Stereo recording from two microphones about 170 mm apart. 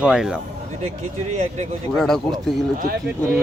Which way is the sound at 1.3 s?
45° right (ahead or behind).